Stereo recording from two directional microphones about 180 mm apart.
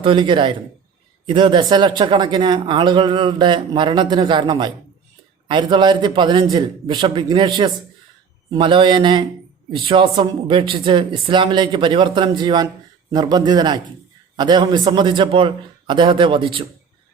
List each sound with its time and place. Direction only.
0.0 s speech: 30° right (ahead or behind)